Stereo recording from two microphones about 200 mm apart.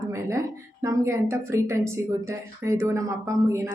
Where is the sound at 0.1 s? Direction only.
15° right (ahead or behind).